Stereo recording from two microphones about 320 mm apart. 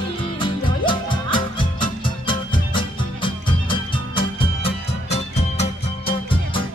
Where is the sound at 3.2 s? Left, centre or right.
Centre.